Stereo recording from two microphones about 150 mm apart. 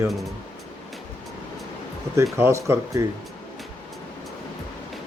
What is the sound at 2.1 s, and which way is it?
Speech, 20° right (ahead or behind).